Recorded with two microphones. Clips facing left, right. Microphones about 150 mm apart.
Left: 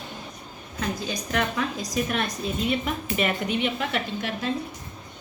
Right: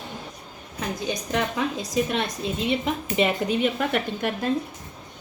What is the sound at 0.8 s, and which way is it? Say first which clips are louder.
A woman's voice: right 1 dB; 20° right (ahead or behind).